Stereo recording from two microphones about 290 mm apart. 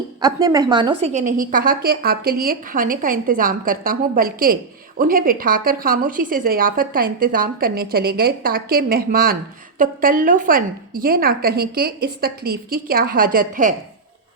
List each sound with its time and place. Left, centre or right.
0.2 s a woman's voice: centre; by 13.7 s right